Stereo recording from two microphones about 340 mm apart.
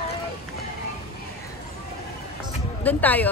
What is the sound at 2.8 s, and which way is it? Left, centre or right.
Speech, centre.